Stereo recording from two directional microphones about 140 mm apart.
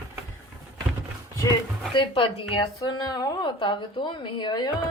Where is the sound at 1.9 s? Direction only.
35° left (ahead or behind).